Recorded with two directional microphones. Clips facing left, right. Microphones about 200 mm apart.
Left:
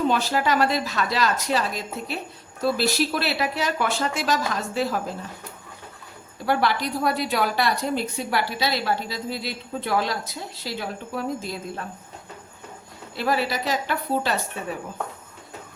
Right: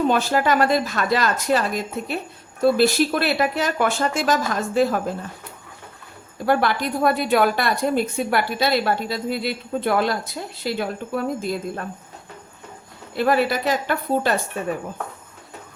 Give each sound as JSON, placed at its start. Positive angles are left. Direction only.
{"t": 0.1, "sound": "a woman's voice", "side_deg": -50}
{"t": 6.4, "sound": "a woman's voice", "side_deg": -50}
{"t": 13.1, "sound": "a woman's voice", "side_deg": -55}